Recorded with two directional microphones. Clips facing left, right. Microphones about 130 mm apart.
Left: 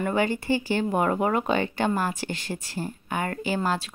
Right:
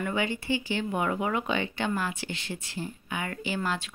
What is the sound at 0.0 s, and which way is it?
Speech, 45° left (ahead or behind).